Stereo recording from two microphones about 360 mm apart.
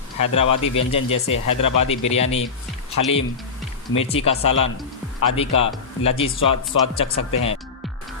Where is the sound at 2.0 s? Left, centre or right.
Centre.